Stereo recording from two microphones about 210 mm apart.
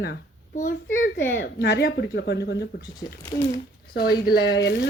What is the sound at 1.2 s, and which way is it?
Speech, 65° left (ahead or behind).